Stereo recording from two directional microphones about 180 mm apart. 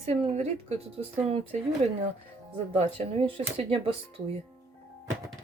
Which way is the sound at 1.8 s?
40° right (ahead or behind).